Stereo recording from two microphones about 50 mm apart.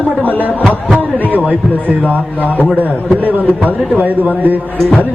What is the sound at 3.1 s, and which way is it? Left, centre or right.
A man's voice, right.